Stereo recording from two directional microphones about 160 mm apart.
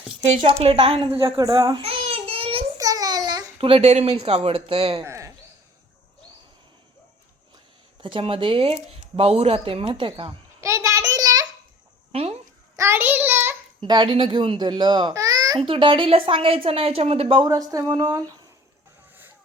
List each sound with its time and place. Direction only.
0.6 s speech: 35° right (ahead or behind)
1.2 s babbling: 25° right (ahead or behind)
2.7 s a child's voice: 20° right (ahead or behind); by 5.0 s 40° right (ahead or behind)
5.0 s a sound: 20° right (ahead or behind)
8.0 s speech: 35° right (ahead or behind)
10.6 s a sound: 20° right (ahead or behind)
12.1 s a sound: 40° right (ahead or behind)
12.7 s child singing: 15° right (ahead or behind)
13.8 s a child's voice: 30° right (ahead or behind)
15.6 s speech: 35° right (ahead or behind)